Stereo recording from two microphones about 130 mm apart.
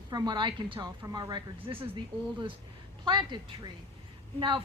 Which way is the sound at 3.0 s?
35° right (ahead or behind).